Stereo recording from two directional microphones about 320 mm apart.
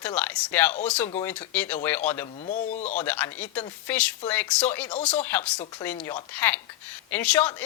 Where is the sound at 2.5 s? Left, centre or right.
Left.